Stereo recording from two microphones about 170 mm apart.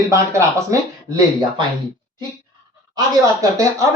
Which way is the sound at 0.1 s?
20° right (ahead or behind).